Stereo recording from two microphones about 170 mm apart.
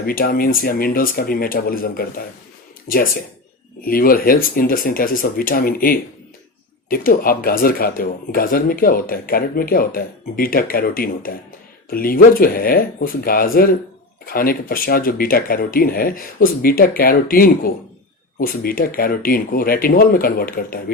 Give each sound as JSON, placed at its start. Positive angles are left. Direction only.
{"t": 0.0, "sound": "speech", "side_deg": 60}
{"t": 3.8, "sound": "speech", "side_deg": 60}